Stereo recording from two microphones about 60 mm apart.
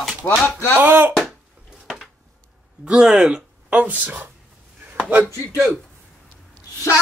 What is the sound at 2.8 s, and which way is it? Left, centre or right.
Speech, centre.